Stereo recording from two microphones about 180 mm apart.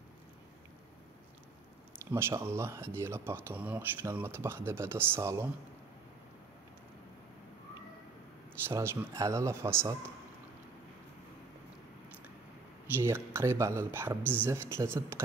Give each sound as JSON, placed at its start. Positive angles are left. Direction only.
{"t": 2.0, "sound": "speech", "side_deg": -15}
{"t": 8.6, "sound": "speech", "side_deg": -15}
{"t": 13.0, "sound": "speech", "side_deg": -15}